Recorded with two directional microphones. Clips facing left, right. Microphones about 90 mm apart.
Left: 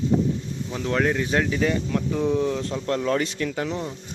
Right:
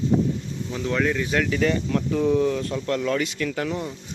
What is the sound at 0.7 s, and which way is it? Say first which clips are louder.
Speech: left 1 dB; 35° left (ahead or behind).